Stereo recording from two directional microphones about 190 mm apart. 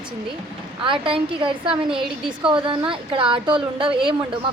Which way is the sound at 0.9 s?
25° right (ahead or behind).